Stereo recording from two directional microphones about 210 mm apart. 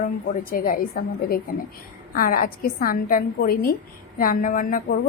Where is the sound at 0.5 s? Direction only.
45° left (ahead or behind).